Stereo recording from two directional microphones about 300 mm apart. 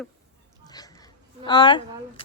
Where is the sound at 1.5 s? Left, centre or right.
Centre.